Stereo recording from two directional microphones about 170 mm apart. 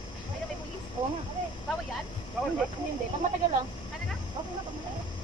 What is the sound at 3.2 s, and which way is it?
Speech, 45° right (ahead or behind).